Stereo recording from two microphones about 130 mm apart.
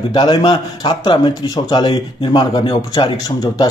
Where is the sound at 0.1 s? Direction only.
35° left (ahead or behind).